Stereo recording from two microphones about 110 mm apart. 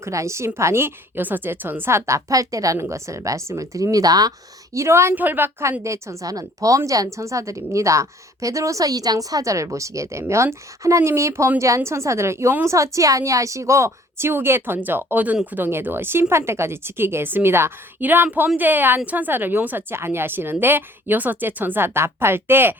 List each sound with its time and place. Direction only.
0.0 s a woman's voice: 25° right (ahead or behind)